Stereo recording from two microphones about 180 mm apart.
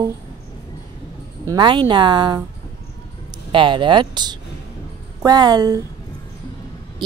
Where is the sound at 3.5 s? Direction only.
25° right (ahead or behind).